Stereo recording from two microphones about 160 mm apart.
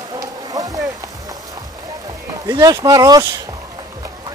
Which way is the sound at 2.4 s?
25° right (ahead or behind).